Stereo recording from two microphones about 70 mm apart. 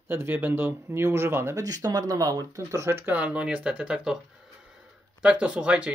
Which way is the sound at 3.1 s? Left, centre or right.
Centre.